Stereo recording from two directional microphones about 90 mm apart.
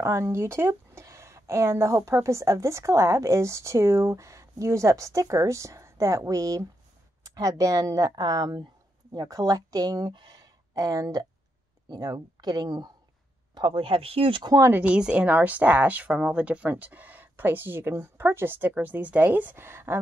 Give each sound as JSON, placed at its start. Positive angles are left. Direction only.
{"t": 0.0, "sound": "speech", "side_deg": -30}
{"t": 10.1, "sound": "a sound", "side_deg": -50}
{"t": 11.9, "sound": "speech", "side_deg": -45}
{"t": 13.6, "sound": "speech", "side_deg": -65}
{"t": 14.7, "sound": "speech", "side_deg": -15}